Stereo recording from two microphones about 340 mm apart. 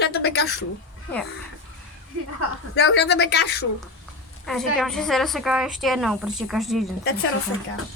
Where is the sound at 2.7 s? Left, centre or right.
Left.